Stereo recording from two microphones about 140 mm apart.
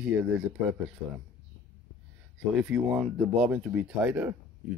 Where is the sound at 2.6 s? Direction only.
5° right (ahead or behind).